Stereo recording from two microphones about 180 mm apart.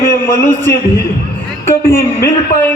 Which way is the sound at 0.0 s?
15° left (ahead or behind).